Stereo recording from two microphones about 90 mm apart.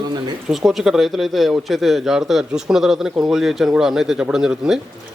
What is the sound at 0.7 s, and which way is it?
A man's voice, 5° right (ahead or behind).